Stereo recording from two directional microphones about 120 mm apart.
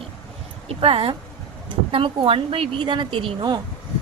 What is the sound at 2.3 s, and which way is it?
A woman's voice, 50° right (ahead or behind).